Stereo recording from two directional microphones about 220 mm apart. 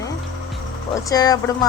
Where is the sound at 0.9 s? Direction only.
15° left (ahead or behind).